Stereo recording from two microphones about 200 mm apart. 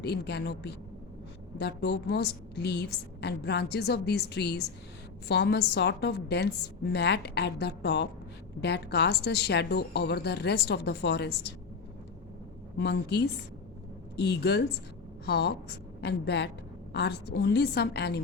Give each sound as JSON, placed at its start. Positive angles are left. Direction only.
{"t": 0.0, "sound": "a woman's voice", "side_deg": 55}
{"t": 12.7, "sound": "a woman's voice", "side_deg": 55}